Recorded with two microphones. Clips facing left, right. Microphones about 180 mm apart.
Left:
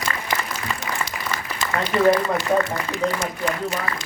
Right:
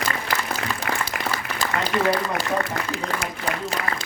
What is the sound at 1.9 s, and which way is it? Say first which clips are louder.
Speech: left 5 dB; 5° left (ahead or behind).